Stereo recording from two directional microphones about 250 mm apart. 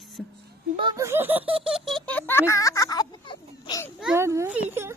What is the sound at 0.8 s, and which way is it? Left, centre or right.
A woman's voice, centre.